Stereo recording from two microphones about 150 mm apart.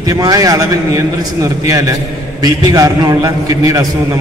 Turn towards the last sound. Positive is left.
turn(degrees=-20)  # may be behind; listen again after turning